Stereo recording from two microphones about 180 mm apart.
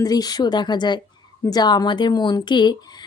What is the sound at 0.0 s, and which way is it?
Speech, 20° left (ahead or behind).